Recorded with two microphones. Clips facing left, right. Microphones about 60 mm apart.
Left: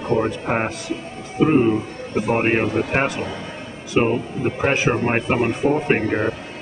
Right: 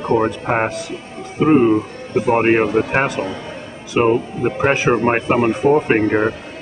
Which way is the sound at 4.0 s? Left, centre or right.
Right.